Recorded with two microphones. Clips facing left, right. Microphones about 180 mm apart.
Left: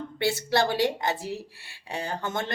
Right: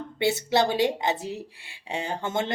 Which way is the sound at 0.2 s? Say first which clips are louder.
Right 2 dB; 20° right (ahead or behind).